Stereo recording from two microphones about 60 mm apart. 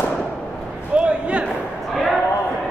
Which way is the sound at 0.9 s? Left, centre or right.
Centre.